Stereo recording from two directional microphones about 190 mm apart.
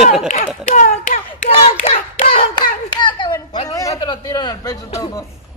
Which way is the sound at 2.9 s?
25° left (ahead or behind).